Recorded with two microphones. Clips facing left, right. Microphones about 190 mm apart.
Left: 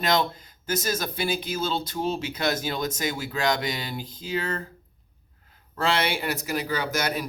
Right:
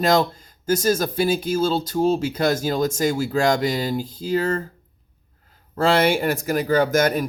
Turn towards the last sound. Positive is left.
turn(degrees=-50)  # may be behind; listen again after turning